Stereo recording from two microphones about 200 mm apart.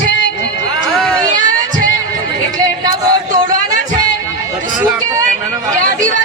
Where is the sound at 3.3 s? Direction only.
40° right (ahead or behind).